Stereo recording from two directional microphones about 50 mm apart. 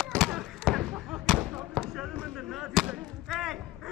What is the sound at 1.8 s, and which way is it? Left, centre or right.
Basketball bounce, left.